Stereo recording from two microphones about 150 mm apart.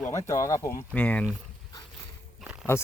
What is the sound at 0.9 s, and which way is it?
Speech, 10° left (ahead or behind).